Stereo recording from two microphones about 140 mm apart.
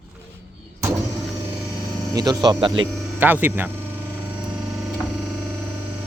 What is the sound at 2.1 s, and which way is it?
Speech, 25° right (ahead or behind).